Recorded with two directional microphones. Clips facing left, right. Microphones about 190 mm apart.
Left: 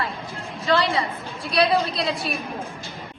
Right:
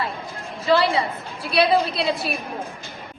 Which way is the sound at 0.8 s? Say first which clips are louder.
Right 2 dB; 30° right (ahead or behind).